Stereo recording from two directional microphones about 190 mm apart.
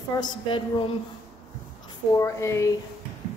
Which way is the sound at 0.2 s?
25° left (ahead or behind).